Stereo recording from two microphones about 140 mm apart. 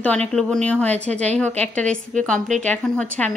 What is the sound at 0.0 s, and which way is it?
A woman's voice, 10° left (ahead or behind).